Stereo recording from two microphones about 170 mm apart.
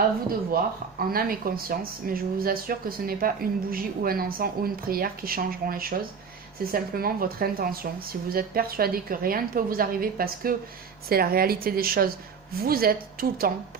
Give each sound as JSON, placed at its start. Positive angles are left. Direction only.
{"t": 0.3, "sound": "speech", "side_deg": -60}